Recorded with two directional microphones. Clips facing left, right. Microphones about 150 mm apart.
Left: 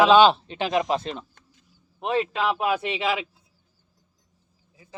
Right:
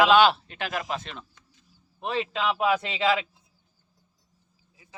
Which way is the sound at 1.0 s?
35° left (ahead or behind).